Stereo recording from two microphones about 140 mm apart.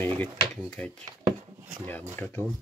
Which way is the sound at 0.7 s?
5° left (ahead or behind).